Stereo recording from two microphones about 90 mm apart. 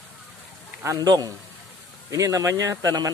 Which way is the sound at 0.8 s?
45° right (ahead or behind).